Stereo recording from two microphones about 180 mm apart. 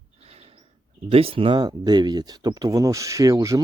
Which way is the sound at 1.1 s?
30° right (ahead or behind).